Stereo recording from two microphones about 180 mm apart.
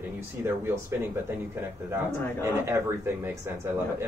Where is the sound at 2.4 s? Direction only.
15° right (ahead or behind).